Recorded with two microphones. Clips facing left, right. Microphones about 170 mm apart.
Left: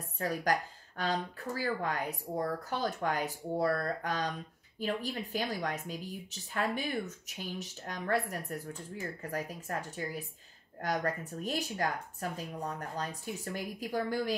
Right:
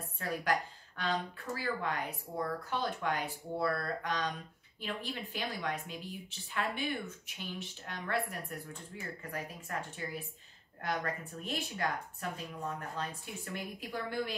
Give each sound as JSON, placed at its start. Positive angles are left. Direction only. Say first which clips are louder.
{"t": 0.2, "sound": "speech", "louder": "left 2 dB", "side_deg": 40}